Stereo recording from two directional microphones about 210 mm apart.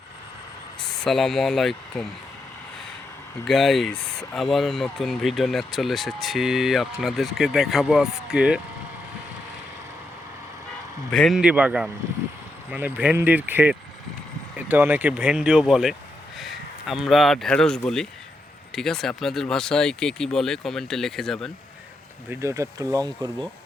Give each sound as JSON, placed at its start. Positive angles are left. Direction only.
{"t": 0.8, "sound": "speech", "side_deg": 0}
{"t": 3.4, "sound": "speech", "side_deg": 0}
{"t": 11.1, "sound": "speech", "side_deg": 0}
{"t": 22.3, "sound": "speech", "side_deg": -15}